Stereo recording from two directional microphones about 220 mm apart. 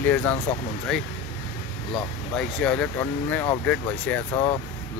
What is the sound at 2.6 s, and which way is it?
Speech, 5° left (ahead or behind).